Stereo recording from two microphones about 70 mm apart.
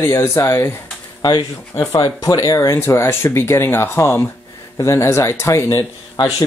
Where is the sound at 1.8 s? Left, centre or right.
Left.